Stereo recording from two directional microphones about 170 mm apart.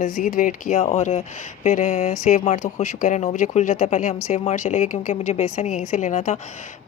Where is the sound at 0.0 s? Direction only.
50° left (ahead or behind).